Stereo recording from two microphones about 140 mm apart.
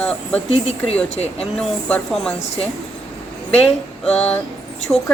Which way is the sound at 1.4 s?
5° left (ahead or behind).